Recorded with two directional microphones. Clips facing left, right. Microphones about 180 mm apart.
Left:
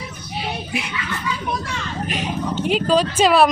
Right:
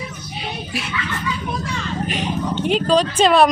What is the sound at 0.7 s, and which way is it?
Speech, 15° left (ahead or behind).